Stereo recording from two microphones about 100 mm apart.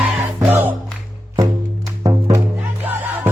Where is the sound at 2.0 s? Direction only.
45° right (ahead or behind).